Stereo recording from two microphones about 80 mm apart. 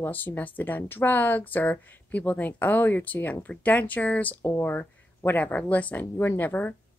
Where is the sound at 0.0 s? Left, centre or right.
Left.